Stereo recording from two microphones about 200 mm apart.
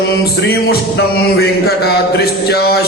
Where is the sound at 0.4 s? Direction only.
55° left (ahead or behind).